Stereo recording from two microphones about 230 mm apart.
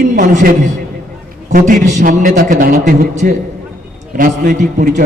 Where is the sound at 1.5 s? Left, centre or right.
Right.